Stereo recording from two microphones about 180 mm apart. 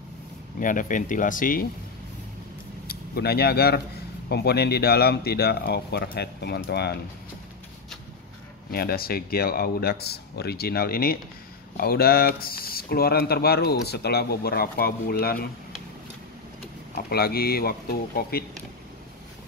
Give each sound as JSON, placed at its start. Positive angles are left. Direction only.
{"t": 0.6, "sound": "speech", "side_deg": 45}
{"t": 2.9, "sound": "speech", "side_deg": 60}
{"t": 8.7, "sound": "speech", "side_deg": 55}
{"t": 16.9, "sound": "speech", "side_deg": 60}